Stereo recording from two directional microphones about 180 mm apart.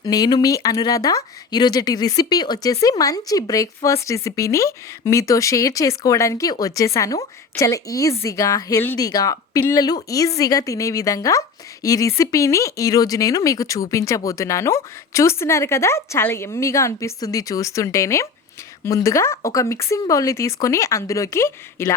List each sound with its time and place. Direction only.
0.0 s speech: 20° left (ahead or behind)